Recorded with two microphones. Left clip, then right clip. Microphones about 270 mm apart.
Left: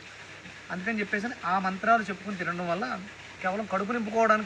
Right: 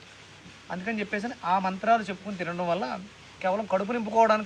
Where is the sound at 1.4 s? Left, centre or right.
Right.